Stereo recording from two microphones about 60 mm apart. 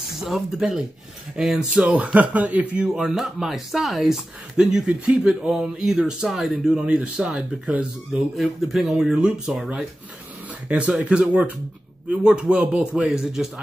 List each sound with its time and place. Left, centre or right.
0.2 s speech: centre
1.8 s a man's voice: right
2.9 s speech: centre
4.6 s a man's voice: centre
8.4 s speech: centre
10.7 s a man's voice: right
13.1 s speech: centre